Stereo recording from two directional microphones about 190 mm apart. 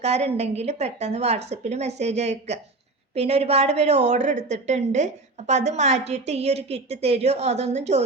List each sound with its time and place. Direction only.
0.0 s a woman's voice: 35° right (ahead or behind)